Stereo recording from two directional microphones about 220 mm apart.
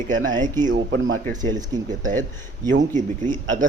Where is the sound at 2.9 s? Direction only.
35° right (ahead or behind).